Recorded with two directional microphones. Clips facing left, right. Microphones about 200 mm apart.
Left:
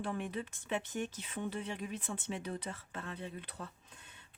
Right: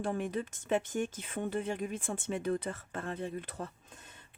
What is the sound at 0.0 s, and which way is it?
Speech, 45° right (ahead or behind).